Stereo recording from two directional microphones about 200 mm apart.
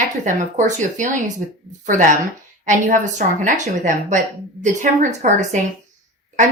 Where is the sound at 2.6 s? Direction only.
40° right (ahead or behind).